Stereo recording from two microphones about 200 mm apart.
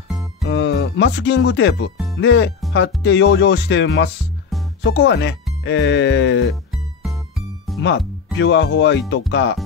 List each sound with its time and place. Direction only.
0.5 s speech: 60° left (ahead or behind)
4.5 s music: centre (ahead or behind)
4.8 s speech: 60° left (ahead or behind)
6.7 s music: centre (ahead or behind)
8.4 s speech: 60° left (ahead or behind)